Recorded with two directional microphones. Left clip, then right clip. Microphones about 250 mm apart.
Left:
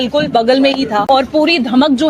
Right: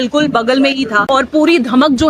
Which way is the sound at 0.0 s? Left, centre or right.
Centre.